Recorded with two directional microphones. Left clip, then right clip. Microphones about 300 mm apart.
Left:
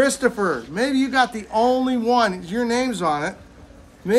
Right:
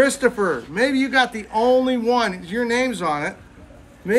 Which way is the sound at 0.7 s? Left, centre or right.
Centre.